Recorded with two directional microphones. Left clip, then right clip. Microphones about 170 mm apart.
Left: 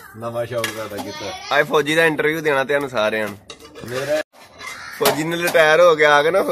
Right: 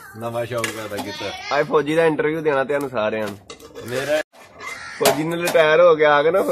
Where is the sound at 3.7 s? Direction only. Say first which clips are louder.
Even; 50° right (ahead or behind).